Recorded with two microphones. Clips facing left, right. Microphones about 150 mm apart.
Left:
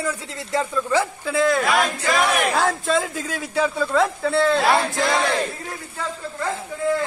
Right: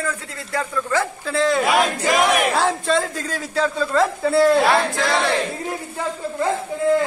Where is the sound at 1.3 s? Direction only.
Centre (ahead or behind).